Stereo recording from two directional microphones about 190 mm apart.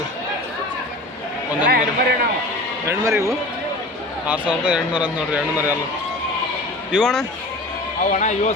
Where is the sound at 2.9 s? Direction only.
15° right (ahead or behind).